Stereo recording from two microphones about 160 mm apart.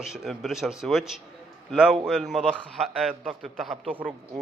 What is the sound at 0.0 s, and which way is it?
A man's voice, centre (ahead or behind).